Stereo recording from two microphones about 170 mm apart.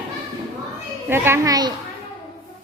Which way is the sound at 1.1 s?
15° right (ahead or behind).